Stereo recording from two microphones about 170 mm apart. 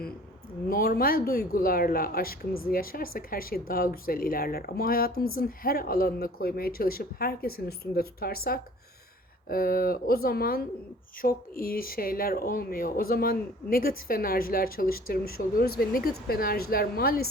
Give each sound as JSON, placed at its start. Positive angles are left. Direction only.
{"t": 0.7, "sound": "speech", "side_deg": 60}